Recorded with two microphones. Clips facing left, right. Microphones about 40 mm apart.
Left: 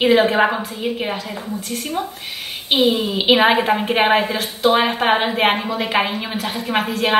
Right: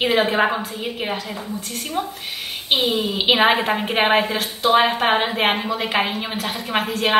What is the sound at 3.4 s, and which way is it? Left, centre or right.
A woman's voice, centre.